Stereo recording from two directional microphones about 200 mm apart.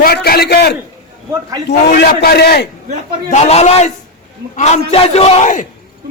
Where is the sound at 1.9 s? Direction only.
50° left (ahead or behind).